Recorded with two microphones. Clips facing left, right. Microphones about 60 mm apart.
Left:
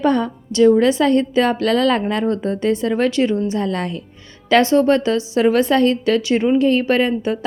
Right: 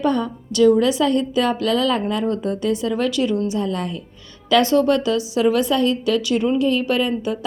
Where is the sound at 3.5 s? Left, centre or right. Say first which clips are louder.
Left 2 dB; left.